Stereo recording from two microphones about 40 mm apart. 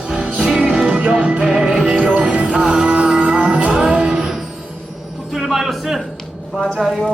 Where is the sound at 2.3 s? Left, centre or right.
Right.